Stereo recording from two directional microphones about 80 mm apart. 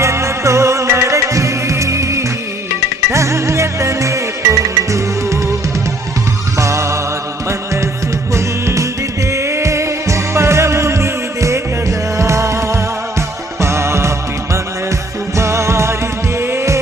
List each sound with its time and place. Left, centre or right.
0.0 s music: right
6.6 s music: right
15.4 s music: right